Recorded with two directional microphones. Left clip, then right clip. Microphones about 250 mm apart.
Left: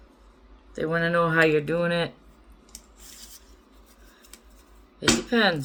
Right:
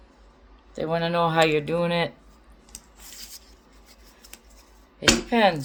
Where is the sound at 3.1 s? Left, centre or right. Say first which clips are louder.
Right 5 dB; right.